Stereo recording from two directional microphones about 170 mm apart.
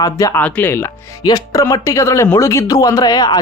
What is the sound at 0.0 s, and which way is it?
Speech, 20° left (ahead or behind).